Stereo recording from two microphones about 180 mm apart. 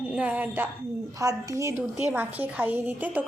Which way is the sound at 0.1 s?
5° right (ahead or behind).